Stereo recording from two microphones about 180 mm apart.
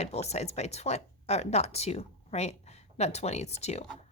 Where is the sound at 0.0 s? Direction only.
35° left (ahead or behind).